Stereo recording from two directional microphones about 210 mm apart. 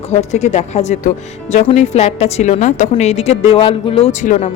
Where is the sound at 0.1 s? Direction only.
30° left (ahead or behind).